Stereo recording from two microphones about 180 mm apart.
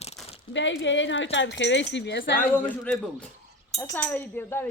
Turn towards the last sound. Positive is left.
turn(degrees=10)  # may be behind; listen again after turning